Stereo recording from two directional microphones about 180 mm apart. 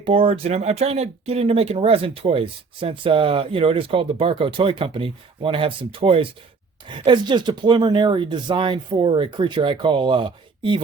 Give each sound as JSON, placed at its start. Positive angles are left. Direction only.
{"t": 0.0, "sound": "speech", "side_deg": -30}